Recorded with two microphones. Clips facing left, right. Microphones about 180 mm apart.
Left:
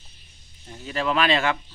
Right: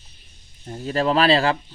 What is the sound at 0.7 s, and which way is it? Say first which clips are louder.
Speech: right 5 dB; 40° right (ahead or behind).